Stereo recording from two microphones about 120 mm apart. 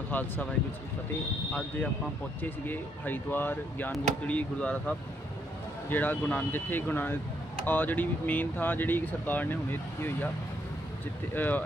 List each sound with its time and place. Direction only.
0.1 s speech: 10° left (ahead or behind)
2.4 s speech: 15° left (ahead or behind)
11.3 s speech: 15° left (ahead or behind)